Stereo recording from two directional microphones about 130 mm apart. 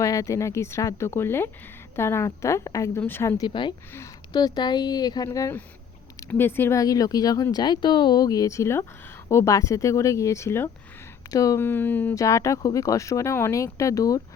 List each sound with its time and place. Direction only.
0.0 s speech: 25° left (ahead or behind)
3.4 s speech: 35° left (ahead or behind)
11.6 s speech: 15° left (ahead or behind)